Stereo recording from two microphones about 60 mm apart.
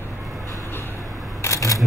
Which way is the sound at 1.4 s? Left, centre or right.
Left.